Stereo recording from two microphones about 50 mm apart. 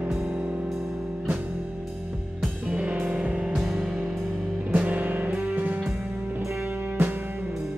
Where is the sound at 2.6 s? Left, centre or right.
Right.